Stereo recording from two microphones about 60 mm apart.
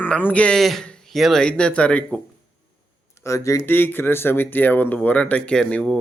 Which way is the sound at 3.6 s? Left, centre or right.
Left.